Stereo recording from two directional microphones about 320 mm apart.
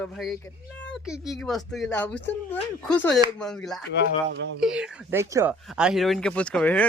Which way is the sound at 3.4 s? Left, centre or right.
Centre.